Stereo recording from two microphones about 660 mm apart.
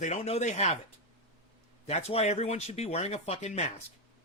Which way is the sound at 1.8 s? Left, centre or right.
Centre.